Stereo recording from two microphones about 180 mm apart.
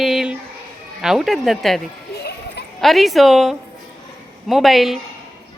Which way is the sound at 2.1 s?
65° left (ahead or behind).